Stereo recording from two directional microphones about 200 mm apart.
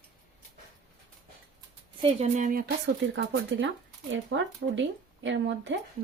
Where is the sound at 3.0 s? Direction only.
65° right (ahead or behind).